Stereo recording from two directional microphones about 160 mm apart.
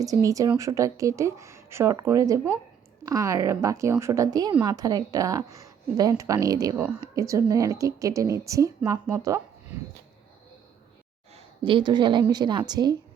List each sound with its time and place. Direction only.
0.0 s speech: 20° right (ahead or behind)
11.3 s speech: 30° right (ahead or behind)